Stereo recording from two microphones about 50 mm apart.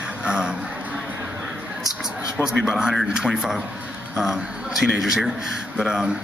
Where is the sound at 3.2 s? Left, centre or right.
Centre.